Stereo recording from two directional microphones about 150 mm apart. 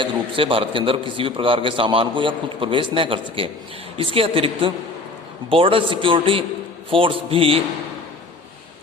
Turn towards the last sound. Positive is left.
turn(degrees=-40)  # may be behind; listen again after turning